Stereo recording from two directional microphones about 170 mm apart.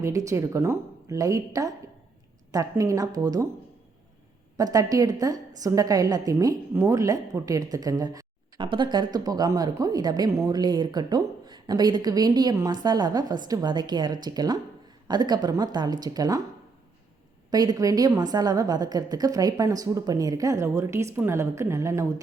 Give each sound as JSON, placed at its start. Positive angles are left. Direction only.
{"t": 0.0, "sound": "a woman's voice", "side_deg": -20}
{"t": 4.5, "sound": "a woman's voice", "side_deg": -20}
{"t": 17.5, "sound": "a woman's voice", "side_deg": -25}